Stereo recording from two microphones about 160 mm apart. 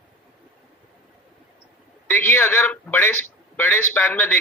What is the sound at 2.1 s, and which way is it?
A man's voice, 15° left (ahead or behind).